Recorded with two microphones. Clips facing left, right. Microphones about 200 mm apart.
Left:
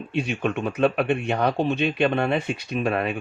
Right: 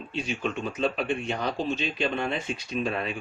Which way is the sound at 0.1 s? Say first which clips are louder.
Left 5 dB; 60° left (ahead or behind).